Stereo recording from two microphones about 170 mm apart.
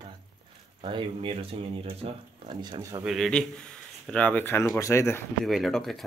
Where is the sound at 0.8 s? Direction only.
30° right (ahead or behind).